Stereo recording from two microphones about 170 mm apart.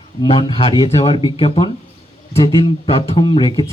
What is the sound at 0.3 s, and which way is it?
Speech, 30° left (ahead or behind).